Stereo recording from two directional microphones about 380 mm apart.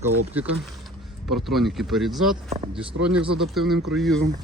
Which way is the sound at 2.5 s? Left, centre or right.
Centre.